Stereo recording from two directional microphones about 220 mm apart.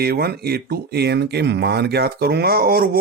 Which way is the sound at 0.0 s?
45° right (ahead or behind).